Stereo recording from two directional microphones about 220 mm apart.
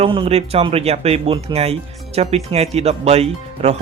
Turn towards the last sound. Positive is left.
turn(degrees=-30)  # may be behind; listen again after turning